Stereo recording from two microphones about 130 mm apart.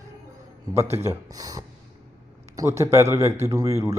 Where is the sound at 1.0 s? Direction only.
25° right (ahead or behind).